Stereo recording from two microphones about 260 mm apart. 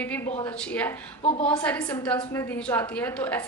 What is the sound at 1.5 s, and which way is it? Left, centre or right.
A woman's voice, centre.